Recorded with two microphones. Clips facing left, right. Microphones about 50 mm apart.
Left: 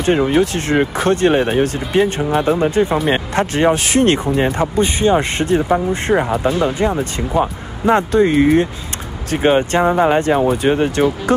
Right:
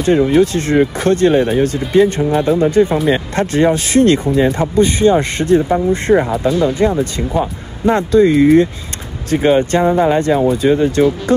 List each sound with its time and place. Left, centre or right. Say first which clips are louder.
0.0 s speech: right 3 dB; left
6.4 s speech: right 3 dB; left
10.5 s speech: right 2 dB; left